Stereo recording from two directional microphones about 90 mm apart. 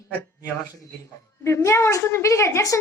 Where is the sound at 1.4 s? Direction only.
30° left (ahead or behind).